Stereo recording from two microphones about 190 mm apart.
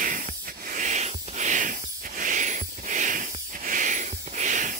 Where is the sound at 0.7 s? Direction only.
40° right (ahead or behind).